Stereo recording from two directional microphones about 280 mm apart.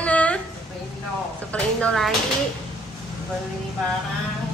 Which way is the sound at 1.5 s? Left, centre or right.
Centre.